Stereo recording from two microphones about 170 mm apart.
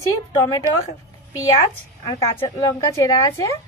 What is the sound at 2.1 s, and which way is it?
A woman's voice, 20° left (ahead or behind).